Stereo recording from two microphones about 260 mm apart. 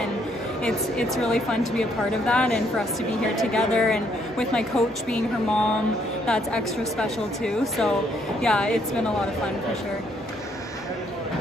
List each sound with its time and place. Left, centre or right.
0.7 s a woman's voice: centre